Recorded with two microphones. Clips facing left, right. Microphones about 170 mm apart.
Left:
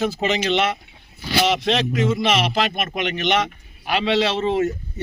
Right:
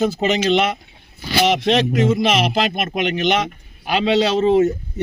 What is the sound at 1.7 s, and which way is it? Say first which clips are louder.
Speech: right 4 dB; 45° right (ahead or behind).